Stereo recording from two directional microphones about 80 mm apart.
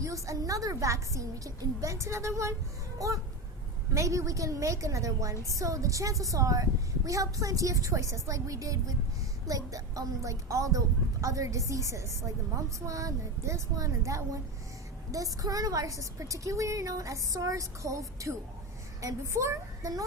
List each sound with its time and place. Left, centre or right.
0.0 s a woman's voice: right